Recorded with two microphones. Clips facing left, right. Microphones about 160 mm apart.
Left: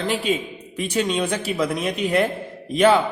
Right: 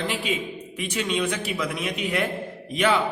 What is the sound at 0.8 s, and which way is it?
A man's voice, 35° left (ahead or behind).